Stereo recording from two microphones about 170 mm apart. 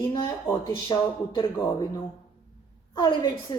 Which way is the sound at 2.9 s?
25° left (ahead or behind).